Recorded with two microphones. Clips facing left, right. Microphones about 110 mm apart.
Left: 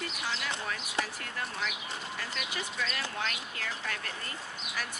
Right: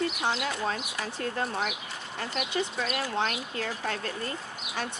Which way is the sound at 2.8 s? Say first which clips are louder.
Right 3 dB; 30° right (ahead or behind).